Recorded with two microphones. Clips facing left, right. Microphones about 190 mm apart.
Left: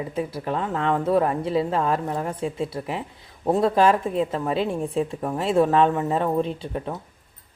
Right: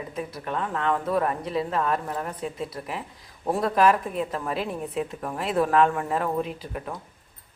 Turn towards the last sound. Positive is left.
turn(degrees=25)  # may be behind; listen again after turning